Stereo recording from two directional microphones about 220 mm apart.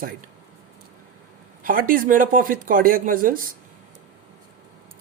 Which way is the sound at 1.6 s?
40° right (ahead or behind).